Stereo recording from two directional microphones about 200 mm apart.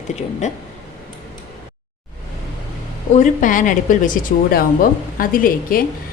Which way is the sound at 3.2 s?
40° left (ahead or behind).